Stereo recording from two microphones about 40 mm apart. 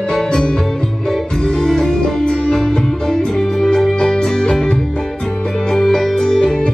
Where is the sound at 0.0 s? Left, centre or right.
Centre.